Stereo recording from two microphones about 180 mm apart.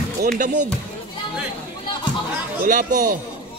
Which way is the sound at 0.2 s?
45° right (ahead or behind).